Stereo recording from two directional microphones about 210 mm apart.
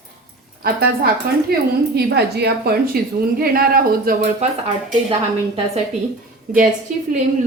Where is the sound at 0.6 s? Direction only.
45° right (ahead or behind).